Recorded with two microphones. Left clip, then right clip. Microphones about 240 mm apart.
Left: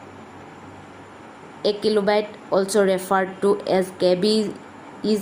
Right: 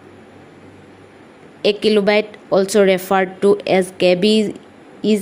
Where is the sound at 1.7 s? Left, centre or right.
Right.